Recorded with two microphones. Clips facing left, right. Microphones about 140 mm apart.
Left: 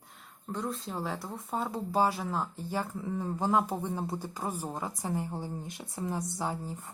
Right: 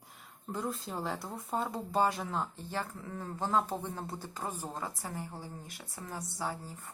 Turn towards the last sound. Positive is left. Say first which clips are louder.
# left 4 dB
turn(degrees=20)  # may be behind; listen again after turning